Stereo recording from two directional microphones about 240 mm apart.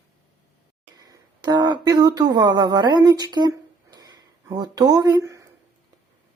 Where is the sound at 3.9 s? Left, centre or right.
Centre.